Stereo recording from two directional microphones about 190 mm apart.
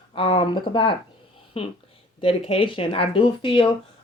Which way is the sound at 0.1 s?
25° left (ahead or behind).